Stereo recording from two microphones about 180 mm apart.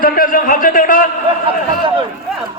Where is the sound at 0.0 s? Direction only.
55° left (ahead or behind).